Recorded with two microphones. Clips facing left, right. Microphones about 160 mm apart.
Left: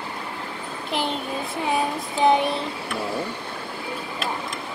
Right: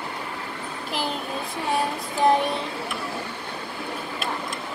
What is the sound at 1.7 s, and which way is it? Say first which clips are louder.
Child singing: even; centre (ahead or behind).